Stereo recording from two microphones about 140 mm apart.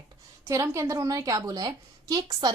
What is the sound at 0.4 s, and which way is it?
A woman's voice, 20° right (ahead or behind).